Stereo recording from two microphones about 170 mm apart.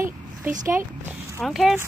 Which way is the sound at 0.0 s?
50° right (ahead or behind).